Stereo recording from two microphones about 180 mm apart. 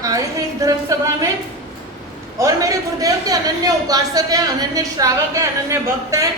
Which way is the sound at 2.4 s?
20° right (ahead or behind).